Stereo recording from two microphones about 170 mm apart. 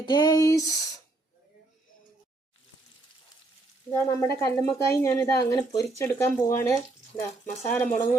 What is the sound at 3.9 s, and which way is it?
Speech, 15° left (ahead or behind).